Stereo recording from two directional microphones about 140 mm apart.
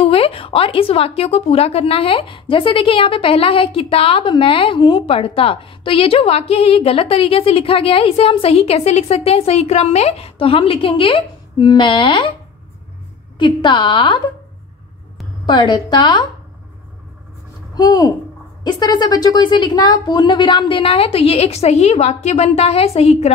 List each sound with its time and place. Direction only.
0.0 s a woman's voice: 45° left (ahead or behind)
13.4 s a woman's voice: 35° left (ahead or behind)
15.4 s a woman's voice: 35° left (ahead or behind)
17.7 s a woman's voice: 25° left (ahead or behind); by 23.3 s 50° left (ahead or behind)